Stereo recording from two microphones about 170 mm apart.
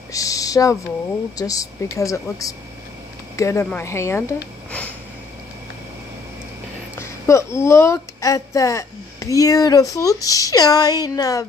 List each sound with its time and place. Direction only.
0.1 s speech: 20° left (ahead or behind)
4.6 s sniff: 5° left (ahead or behind)
7.0 s speech: 15° left (ahead or behind)